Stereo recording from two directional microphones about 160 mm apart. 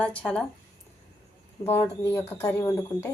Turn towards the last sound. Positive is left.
turn(degrees=15)  # may be behind; listen again after turning